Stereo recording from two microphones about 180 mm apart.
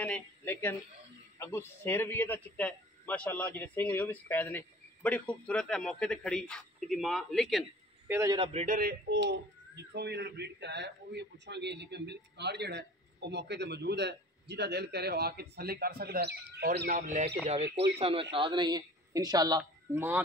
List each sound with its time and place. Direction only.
0.0 s a man's voice: 10° left (ahead or behind)
8.1 s a man's voice: 15° right (ahead or behind)
8.6 s speech: 50° right (ahead or behind)
9.8 s a man's voice: 70° right (ahead or behind); by 17.3 s 45° right (ahead or behind)
17.9 s a woman's voice: 35° right (ahead or behind); by 20.2 s 15° right (ahead or behind)